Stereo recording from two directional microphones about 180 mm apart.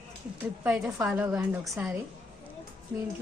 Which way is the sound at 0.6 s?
5° right (ahead or behind).